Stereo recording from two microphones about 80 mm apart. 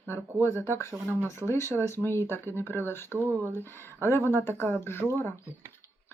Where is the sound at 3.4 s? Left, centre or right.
Left.